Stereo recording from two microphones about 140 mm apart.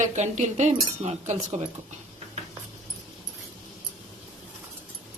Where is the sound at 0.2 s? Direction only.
55° right (ahead or behind).